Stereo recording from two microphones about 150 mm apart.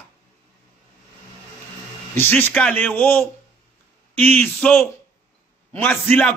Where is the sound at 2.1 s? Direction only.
15° left (ahead or behind).